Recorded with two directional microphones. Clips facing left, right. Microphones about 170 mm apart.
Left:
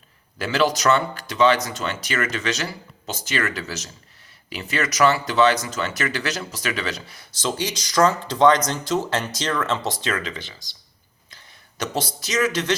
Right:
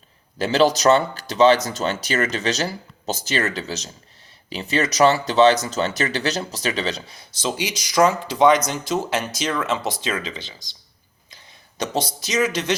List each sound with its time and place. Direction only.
0.3 s speech: 30° right (ahead or behind)
3.5 s speech: 25° right (ahead or behind)
12.3 s speech: 15° right (ahead or behind)